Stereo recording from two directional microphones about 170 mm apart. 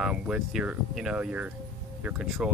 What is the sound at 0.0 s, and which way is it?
Speech, 5° right (ahead or behind).